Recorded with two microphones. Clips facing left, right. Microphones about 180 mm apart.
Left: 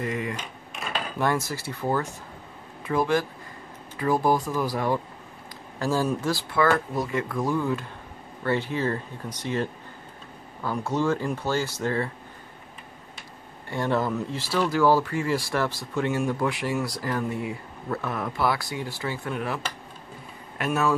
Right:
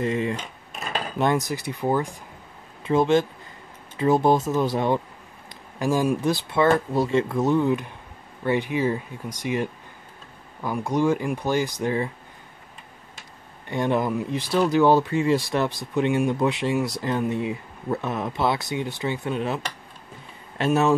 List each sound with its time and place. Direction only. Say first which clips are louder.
0.0 s speech: right 5 dB; 25° right (ahead or behind)
13.7 s speech: right 2 dB; 20° right (ahead or behind)